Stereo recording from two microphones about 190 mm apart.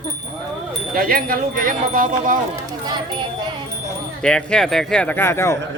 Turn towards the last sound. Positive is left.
turn(degrees=15)  # may be behind; listen again after turning